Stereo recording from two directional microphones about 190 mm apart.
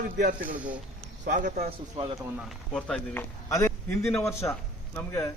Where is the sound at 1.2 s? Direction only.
40° right (ahead or behind).